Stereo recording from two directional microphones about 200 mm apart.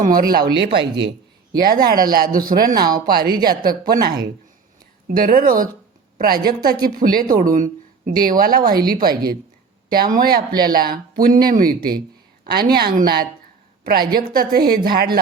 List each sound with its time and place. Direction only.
0.0 s speech: 45° right (ahead or behind)
0.5 s speech: 60° right (ahead or behind)
1.8 s speech: 45° right (ahead or behind)